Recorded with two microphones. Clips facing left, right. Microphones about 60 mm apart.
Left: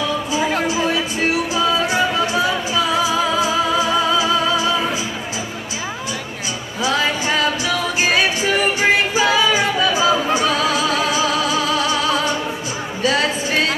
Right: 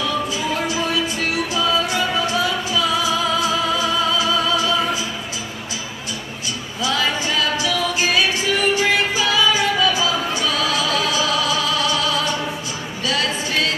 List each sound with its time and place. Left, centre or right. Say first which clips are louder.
0.4 s a sound: left 3 dB; left
0.7 s music: left 2 dB; left
6.8 s music: left 2 dB; left